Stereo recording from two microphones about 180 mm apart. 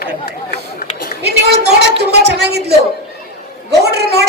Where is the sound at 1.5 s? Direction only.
65° right (ahead or behind).